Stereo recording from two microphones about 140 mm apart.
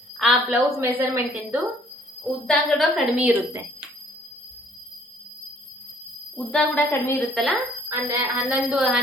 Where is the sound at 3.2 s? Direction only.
15° right (ahead or behind).